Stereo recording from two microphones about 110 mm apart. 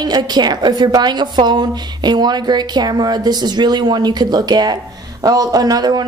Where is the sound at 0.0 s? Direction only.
40° right (ahead or behind).